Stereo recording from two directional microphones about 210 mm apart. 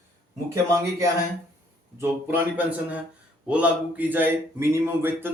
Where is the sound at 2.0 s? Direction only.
10° right (ahead or behind).